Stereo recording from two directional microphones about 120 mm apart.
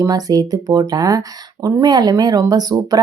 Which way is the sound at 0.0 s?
30° right (ahead or behind).